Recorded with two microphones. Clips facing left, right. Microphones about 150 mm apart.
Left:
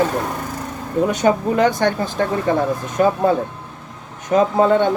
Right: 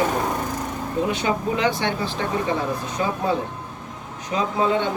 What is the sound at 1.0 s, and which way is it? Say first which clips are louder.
Speech: left 8 dB; 45° left (ahead or behind).